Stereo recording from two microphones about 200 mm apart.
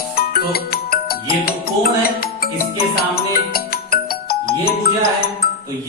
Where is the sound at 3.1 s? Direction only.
50° left (ahead or behind).